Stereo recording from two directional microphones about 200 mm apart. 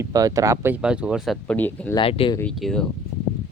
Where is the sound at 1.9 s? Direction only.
25° left (ahead or behind).